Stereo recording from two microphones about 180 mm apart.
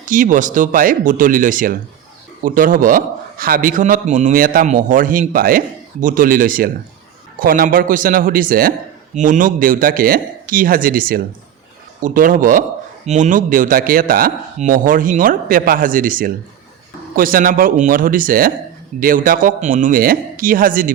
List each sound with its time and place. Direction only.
0.0 s a man's voice: 45° right (ahead or behind)